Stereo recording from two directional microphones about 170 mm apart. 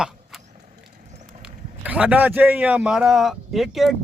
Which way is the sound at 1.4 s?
10° right (ahead or behind).